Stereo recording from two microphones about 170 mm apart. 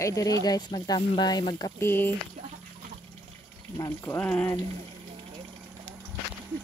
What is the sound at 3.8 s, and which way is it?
Speech, 10° left (ahead or behind).